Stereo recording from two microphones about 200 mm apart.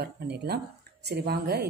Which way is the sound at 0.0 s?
55° right (ahead or behind).